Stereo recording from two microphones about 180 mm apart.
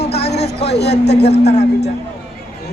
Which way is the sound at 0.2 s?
65° left (ahead or behind).